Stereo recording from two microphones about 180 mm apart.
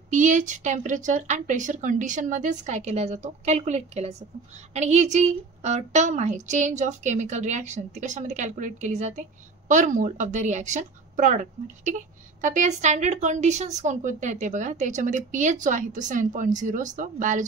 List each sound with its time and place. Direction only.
0.1 s a woman's voice: 45° right (ahead or behind)